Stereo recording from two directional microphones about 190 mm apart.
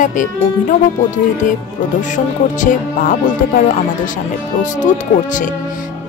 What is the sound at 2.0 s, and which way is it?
Speech, 40° left (ahead or behind).